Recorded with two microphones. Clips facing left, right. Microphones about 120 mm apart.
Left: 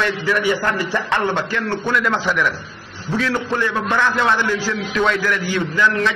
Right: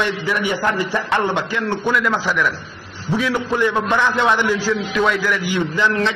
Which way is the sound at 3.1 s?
15° right (ahead or behind).